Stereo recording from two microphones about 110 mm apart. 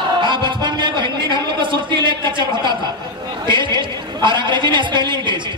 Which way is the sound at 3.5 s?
45° right (ahead or behind).